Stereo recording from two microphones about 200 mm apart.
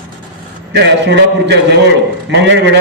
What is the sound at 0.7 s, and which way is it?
A man's voice, 60° right (ahead or behind).